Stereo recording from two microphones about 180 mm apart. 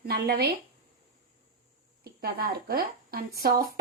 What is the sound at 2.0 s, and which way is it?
A woman's voice, 60° right (ahead or behind).